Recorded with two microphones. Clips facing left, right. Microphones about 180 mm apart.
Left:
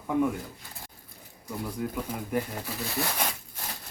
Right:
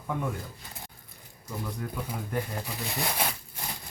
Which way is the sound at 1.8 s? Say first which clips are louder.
Left 4 dB; 10° left (ahead or behind).